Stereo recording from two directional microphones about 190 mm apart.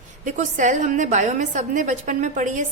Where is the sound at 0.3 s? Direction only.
40° right (ahead or behind).